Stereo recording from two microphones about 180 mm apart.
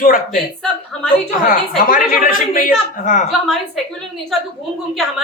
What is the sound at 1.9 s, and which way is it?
Speech, 50° left (ahead or behind).